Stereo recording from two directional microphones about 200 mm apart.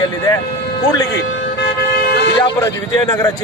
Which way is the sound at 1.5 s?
50° left (ahead or behind).